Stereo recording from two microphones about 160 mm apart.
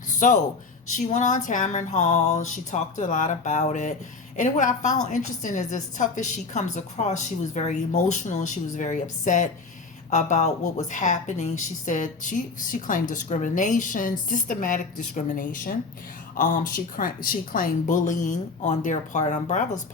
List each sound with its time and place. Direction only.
0.2 s a woman's voice: 55° left (ahead or behind)